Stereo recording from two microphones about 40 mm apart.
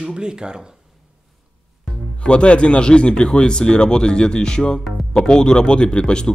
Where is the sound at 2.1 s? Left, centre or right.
Left.